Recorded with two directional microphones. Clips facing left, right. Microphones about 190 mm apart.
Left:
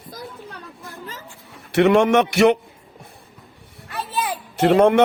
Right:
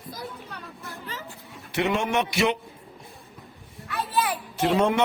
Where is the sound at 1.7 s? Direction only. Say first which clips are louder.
Left 10 dB; 75° left (ahead or behind).